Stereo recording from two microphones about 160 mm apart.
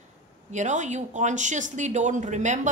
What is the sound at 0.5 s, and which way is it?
Speech, 50° right (ahead or behind).